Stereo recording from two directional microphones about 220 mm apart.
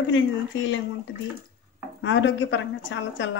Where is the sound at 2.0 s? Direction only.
55° left (ahead or behind).